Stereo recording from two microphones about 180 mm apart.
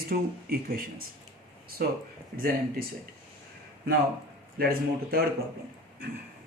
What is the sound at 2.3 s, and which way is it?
Speech, 50° right (ahead or behind).